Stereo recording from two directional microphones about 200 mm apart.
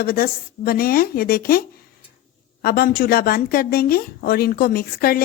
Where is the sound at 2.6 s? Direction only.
50° left (ahead or behind).